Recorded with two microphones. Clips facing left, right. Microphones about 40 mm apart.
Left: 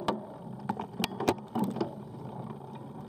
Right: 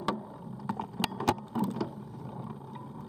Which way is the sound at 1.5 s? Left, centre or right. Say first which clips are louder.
Left 1 dB; left.